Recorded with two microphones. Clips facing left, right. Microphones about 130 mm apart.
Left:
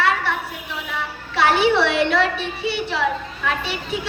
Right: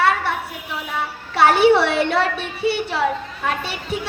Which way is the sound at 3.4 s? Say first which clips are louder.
Even; 40° right (ahead or behind).